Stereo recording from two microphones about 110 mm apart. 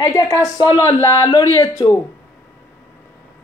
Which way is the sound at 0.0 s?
30° left (ahead or behind).